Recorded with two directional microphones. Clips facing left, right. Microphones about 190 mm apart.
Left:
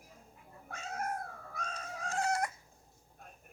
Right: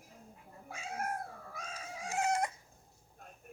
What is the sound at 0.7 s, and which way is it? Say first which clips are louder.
Cat: even; 10° right (ahead or behind).